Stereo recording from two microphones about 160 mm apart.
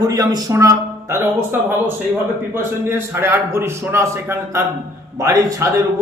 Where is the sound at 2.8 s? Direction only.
15° right (ahead or behind).